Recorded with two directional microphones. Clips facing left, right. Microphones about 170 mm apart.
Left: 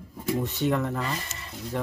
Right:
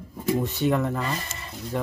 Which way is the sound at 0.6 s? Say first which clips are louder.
Right 2 dB; 5° right (ahead or behind).